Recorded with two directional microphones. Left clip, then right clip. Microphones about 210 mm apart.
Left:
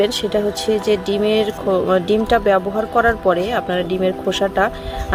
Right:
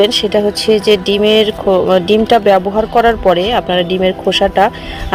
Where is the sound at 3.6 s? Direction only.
40° left (ahead or behind).